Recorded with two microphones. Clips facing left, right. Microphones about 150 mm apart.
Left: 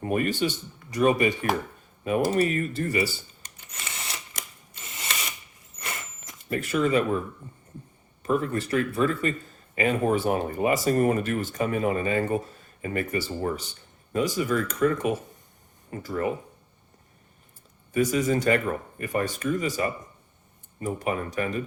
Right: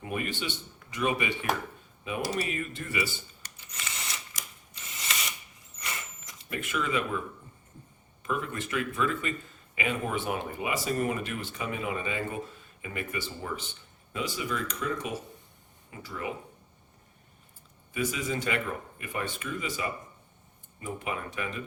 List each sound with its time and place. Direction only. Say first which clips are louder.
0.0 s speech: left 8 dB; 45° left (ahead or behind)
4.4 s a sound: left 4 dB; 55° left (ahead or behind)
6.4 s speech: left 8 dB; 40° left (ahead or behind)
8.2 s speech: left 7 dB; 40° left (ahead or behind)
17.9 s speech: left 8 dB; 45° left (ahead or behind)